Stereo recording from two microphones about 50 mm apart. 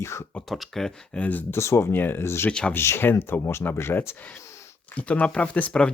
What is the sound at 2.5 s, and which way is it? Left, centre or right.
Speech, centre.